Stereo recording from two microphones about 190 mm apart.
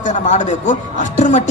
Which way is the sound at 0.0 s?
40° left (ahead or behind).